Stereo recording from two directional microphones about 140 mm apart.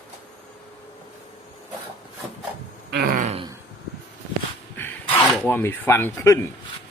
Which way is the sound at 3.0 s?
70° right (ahead or behind).